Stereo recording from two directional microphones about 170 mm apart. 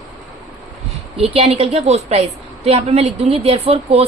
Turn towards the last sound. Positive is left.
turn(degrees=-35)  # may be behind; listen again after turning